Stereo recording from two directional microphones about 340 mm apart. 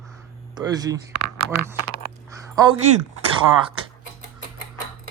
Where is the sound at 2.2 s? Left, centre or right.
Centre.